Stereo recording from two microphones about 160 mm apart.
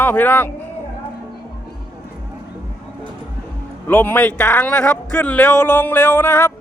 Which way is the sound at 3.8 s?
10° left (ahead or behind).